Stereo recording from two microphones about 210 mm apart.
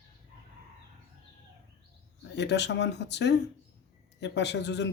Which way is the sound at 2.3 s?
55° left (ahead or behind).